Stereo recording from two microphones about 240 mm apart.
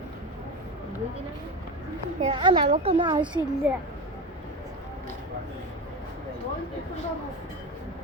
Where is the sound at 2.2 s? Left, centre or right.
Right.